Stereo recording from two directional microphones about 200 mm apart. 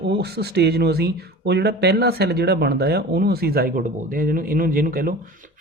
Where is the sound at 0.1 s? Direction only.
55° right (ahead or behind).